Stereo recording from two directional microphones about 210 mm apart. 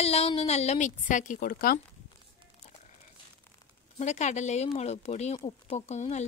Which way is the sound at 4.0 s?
35° left (ahead or behind).